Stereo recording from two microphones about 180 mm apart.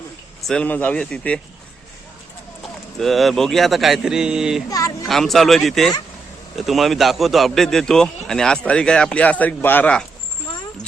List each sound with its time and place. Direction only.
0.4 s speech: 5° left (ahead or behind)
3.0 s a man's voice: centre (ahead or behind)
4.7 s a sound: 20° left (ahead or behind)
5.0 s a man's voice: centre (ahead or behind)